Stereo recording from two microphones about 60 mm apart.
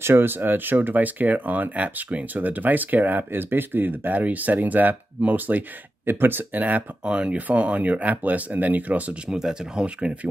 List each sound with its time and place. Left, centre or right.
0.0 s speech: right
9.3 s speech: centre